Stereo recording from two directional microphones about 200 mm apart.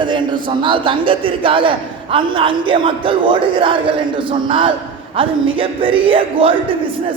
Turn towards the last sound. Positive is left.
turn(degrees=-25)  # may be behind; listen again after turning